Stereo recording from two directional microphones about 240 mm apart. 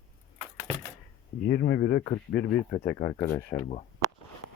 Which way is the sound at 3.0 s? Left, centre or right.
Left.